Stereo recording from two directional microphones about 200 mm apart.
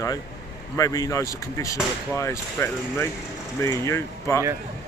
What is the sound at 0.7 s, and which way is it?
Speech, 15° left (ahead or behind).